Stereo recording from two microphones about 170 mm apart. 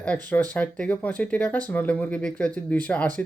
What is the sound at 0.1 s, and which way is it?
Speech, 10° left (ahead or behind).